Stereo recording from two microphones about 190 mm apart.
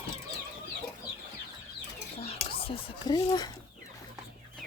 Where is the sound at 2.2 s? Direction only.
30° left (ahead or behind).